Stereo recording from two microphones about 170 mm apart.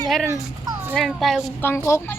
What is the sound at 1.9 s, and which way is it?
Speech, 15° left (ahead or behind).